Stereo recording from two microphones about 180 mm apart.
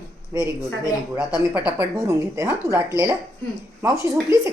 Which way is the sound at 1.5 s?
10° right (ahead or behind).